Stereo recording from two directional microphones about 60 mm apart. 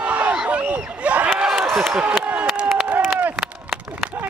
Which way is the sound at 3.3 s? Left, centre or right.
Centre.